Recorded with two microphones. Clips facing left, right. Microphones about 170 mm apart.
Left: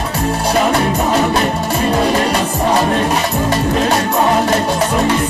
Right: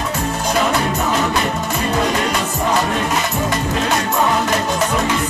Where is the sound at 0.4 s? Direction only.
35° left (ahead or behind).